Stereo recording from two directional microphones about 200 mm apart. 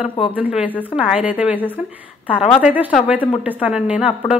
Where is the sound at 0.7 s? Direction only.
10° left (ahead or behind).